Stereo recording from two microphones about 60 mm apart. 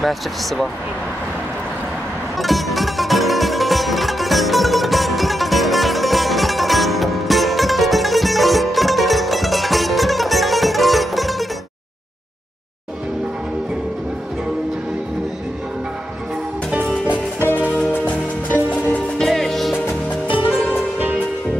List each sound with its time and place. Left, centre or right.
2.3 s music: centre
17.9 s music: left
19.1 s music: centre